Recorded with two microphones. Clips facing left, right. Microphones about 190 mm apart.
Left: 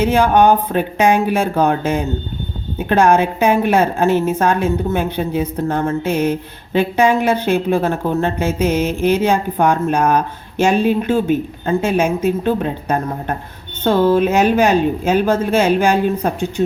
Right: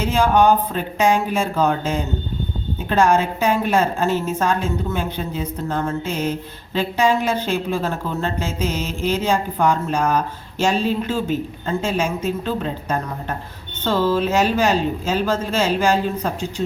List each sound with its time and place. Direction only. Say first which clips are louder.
0.0 s a woman's voice: left 4 dB; 60° left (ahead or behind)